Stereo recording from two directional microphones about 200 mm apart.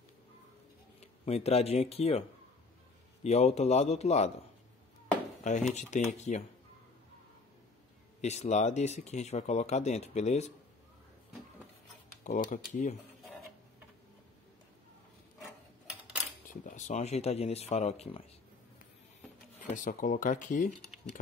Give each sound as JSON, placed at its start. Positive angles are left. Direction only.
{"t": 1.2, "sound": "speech", "side_deg": 30}
{"t": 3.3, "sound": "speech", "side_deg": 35}
{"t": 5.4, "sound": "speech", "side_deg": 35}
{"t": 8.2, "sound": "speech", "side_deg": 35}
{"t": 12.2, "sound": "speech", "side_deg": 40}
{"t": 16.4, "sound": "speech", "side_deg": 40}
{"t": 19.6, "sound": "speech", "side_deg": 40}